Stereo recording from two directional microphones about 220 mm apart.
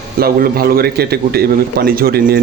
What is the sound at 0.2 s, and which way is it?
A man's voice, 45° right (ahead or behind).